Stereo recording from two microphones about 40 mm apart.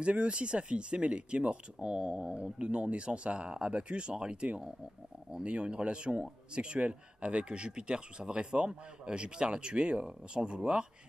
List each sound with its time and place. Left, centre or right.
0.0 s speech: right
2.7 s speech: right